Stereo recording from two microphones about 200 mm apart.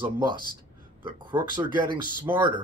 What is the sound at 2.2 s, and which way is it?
Speech, 25° right (ahead or behind).